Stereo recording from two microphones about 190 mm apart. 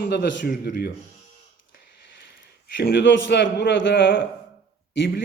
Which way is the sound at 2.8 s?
60° left (ahead or behind).